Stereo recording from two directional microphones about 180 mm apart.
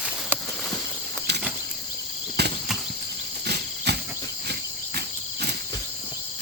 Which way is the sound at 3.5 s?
65° right (ahead or behind).